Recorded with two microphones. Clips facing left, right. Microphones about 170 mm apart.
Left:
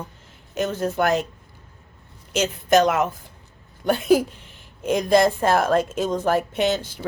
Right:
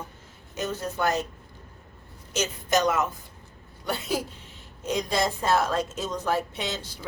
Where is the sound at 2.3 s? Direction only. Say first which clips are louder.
Left 7 dB; 55° left (ahead or behind).